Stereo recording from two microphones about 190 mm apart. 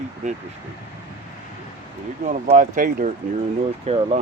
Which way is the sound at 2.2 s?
40° right (ahead or behind).